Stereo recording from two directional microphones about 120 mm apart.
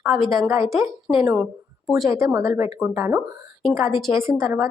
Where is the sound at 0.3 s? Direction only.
25° right (ahead or behind).